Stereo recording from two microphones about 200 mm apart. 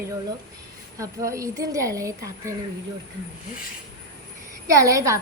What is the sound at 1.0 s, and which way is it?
A woman's voice, 15° right (ahead or behind).